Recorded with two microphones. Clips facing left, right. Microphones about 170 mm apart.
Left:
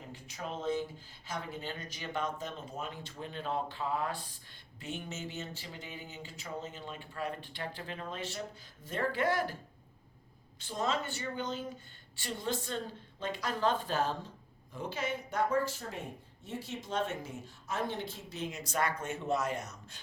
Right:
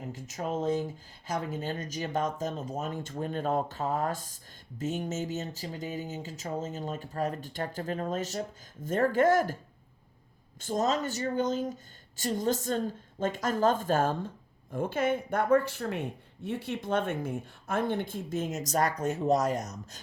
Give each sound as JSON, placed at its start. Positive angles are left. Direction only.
{"t": 0.1, "sound": "speech", "side_deg": -40}
{"t": 10.6, "sound": "speech", "side_deg": -45}